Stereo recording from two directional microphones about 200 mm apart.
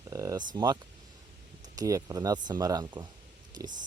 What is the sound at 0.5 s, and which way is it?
Speech, 20° right (ahead or behind).